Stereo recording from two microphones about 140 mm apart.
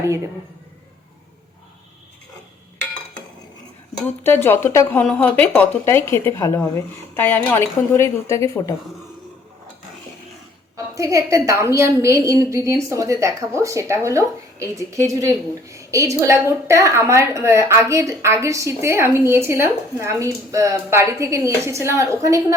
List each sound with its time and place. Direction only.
4.0 s speech: 15° left (ahead or behind)
5.0 s speech: 10° left (ahead or behind)
10.8 s a woman's voice: 25° right (ahead or behind)